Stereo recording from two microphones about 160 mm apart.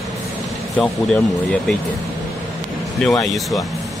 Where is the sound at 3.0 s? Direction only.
5° left (ahead or behind).